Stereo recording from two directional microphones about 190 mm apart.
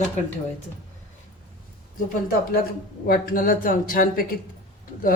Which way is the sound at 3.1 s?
50° left (ahead or behind).